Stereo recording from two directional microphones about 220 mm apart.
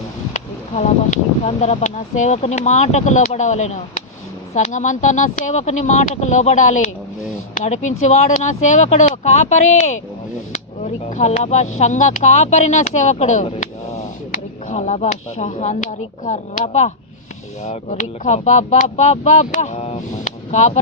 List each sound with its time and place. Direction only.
0.3 s speech: 30° left (ahead or behind)